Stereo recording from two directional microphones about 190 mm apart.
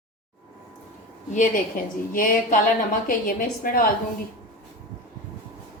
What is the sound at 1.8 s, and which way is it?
A woman's voice, 45° left (ahead or behind).